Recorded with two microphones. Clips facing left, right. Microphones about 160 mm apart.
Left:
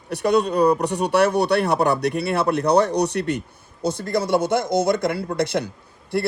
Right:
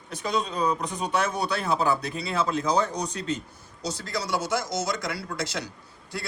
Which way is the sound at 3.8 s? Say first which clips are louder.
Left 9 dB; 55° left (ahead or behind).